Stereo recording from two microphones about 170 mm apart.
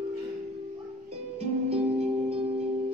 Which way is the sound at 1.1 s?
40° right (ahead or behind).